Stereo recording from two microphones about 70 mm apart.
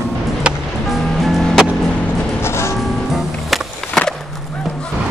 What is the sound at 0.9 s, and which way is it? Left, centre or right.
Music, centre.